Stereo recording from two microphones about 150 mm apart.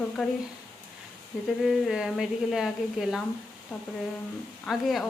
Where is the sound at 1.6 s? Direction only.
Centre (ahead or behind).